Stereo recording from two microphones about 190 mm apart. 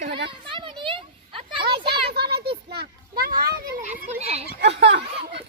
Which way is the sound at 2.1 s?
60° right (ahead or behind).